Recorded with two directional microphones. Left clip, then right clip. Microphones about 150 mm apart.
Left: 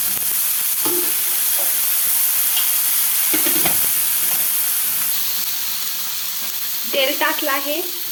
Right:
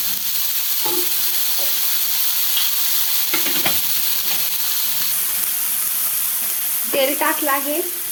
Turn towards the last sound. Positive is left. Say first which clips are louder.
# even
turn(degrees=-20)  # may be behind; listen again after turning